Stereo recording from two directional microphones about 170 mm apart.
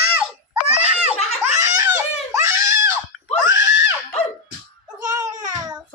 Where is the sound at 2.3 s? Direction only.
20° right (ahead or behind).